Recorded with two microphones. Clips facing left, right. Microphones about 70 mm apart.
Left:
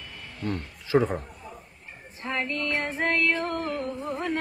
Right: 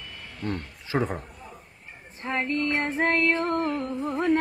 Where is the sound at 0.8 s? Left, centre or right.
Right.